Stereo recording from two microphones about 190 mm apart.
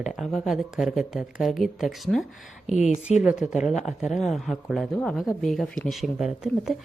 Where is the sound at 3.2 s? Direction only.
5° right (ahead or behind).